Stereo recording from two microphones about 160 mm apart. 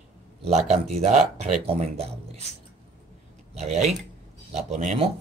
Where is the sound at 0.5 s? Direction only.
40° right (ahead or behind).